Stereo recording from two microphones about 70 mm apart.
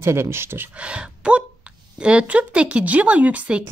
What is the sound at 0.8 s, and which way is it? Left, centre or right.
Speech, centre.